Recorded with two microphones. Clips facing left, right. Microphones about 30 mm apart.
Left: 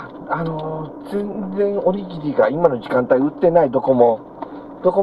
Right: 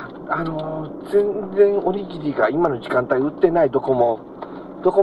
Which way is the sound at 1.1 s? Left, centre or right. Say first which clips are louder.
Right 7 dB; right.